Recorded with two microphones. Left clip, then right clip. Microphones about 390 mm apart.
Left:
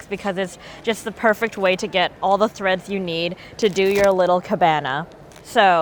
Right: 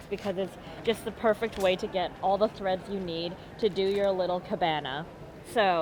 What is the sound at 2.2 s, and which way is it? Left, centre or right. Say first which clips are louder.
Speech: left 7 dB; left.